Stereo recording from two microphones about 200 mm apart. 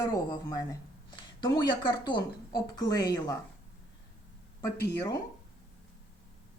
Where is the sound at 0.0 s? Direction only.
15° left (ahead or behind).